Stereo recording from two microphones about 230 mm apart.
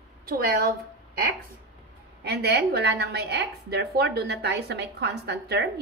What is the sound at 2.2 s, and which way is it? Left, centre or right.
A woman's voice, right.